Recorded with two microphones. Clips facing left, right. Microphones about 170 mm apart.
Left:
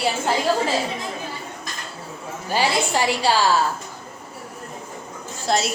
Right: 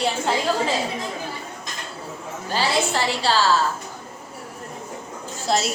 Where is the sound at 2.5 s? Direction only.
15° left (ahead or behind).